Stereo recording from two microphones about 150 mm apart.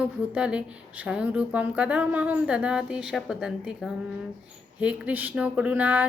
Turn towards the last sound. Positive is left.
turn(degrees=-10)  # may be behind; listen again after turning